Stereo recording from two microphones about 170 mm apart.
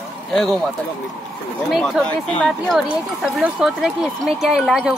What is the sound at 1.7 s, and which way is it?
Speech, centre (ahead or behind).